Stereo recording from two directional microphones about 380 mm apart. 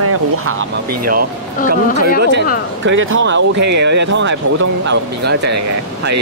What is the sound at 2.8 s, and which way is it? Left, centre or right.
Speech, right.